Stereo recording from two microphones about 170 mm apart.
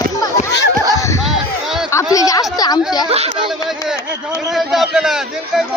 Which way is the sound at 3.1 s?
40° right (ahead or behind).